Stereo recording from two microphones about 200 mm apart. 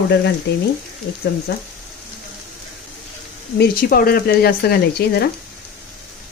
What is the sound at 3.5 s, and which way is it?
Speech, 50° left (ahead or behind).